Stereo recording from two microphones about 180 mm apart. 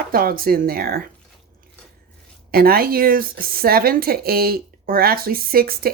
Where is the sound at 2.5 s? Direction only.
55° right (ahead or behind).